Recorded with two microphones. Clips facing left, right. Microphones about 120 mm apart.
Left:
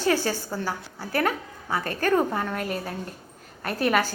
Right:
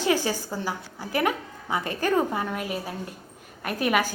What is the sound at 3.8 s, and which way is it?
Speech, 10° right (ahead or behind).